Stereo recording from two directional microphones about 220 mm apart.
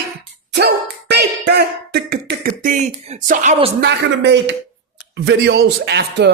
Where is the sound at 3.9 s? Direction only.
55° right (ahead or behind).